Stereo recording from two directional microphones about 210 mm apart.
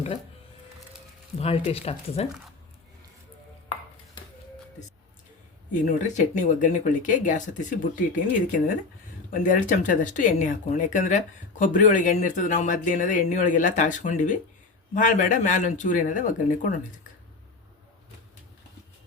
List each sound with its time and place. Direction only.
1.4 s speech: 30° left (ahead or behind)
5.7 s speech: 35° left (ahead or behind)